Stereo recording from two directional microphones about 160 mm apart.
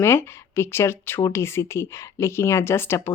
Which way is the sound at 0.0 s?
15° left (ahead or behind).